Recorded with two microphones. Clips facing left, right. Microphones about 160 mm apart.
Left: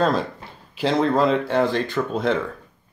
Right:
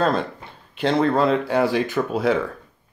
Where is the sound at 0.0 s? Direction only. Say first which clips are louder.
Even; centre (ahead or behind).